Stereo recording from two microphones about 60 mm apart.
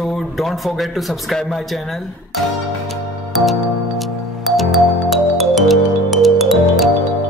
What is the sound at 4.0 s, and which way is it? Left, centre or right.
Music, centre.